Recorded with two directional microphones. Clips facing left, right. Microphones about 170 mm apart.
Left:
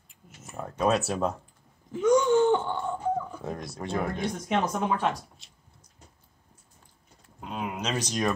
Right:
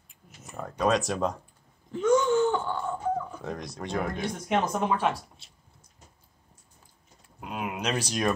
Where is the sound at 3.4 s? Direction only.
5° left (ahead or behind).